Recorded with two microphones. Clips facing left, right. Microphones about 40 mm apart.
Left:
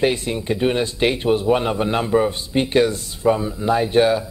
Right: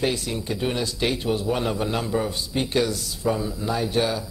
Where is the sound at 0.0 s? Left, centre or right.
Left.